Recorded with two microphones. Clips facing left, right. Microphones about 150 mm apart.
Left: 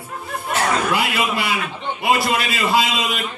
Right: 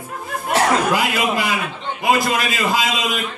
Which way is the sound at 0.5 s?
40° right (ahead or behind).